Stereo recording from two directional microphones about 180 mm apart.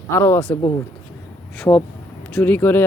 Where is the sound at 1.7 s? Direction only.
20° left (ahead or behind).